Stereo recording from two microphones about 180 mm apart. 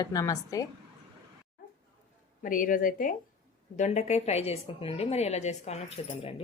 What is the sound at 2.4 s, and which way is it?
A woman's voice, 50° left (ahead or behind).